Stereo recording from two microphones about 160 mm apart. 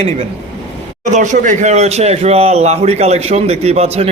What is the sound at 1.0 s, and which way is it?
A man's voice, 50° right (ahead or behind).